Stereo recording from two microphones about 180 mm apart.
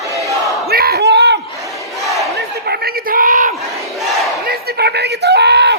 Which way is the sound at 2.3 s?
65° right (ahead or behind).